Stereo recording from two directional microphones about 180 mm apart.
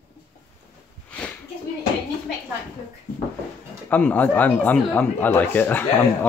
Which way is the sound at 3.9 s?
10° left (ahead or behind).